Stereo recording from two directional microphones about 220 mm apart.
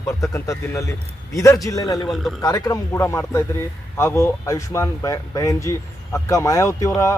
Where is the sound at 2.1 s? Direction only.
Centre (ahead or behind).